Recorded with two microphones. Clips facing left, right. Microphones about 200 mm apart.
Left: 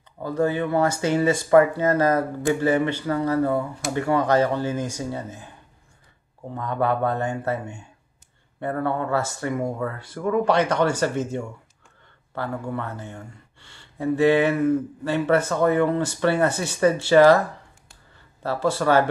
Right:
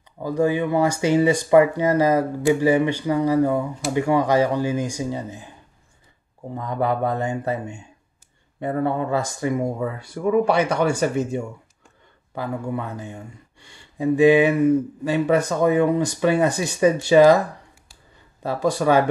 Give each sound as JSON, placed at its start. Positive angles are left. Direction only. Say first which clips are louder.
{"t": 0.2, "sound": "speech", "louder": "right 2 dB", "side_deg": -15}
{"t": 6.5, "sound": "speech", "louder": "even", "side_deg": -10}
{"t": 18.4, "sound": "speech", "louder": "right 2 dB", "side_deg": -15}